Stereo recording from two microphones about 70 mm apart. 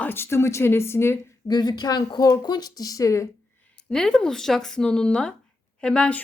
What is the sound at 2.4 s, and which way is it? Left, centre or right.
Speech, left.